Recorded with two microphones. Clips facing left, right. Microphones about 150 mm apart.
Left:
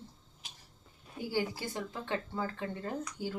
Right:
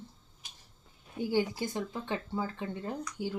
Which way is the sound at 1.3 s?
15° right (ahead or behind).